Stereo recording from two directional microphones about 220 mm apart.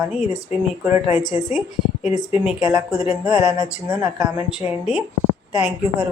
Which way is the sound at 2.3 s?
5° right (ahead or behind).